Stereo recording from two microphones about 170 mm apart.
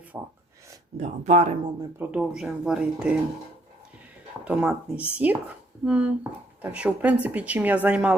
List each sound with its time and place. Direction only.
0.1 s a woman's voice: 10° right (ahead or behind)
0.9 s speech: 40° right (ahead or behind)
2.0 s speech: 5° right (ahead or behind)
4.4 s a woman's voice: 10° right (ahead or behind)